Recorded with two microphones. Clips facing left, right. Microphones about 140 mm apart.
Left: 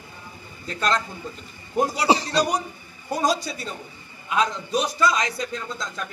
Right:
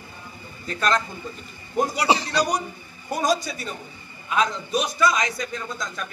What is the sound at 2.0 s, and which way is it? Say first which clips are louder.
A man's voice: left 1 dB; 35° left (ahead or behind).